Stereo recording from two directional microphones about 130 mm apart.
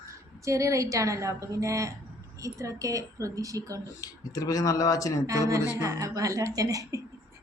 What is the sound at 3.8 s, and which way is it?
Speech, 25° left (ahead or behind).